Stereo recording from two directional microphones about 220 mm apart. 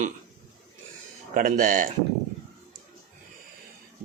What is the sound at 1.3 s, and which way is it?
Speech, 40° right (ahead or behind).